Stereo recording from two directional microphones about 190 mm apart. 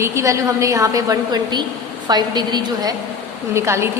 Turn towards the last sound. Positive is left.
turn(degrees=-15)  # may be behind; listen again after turning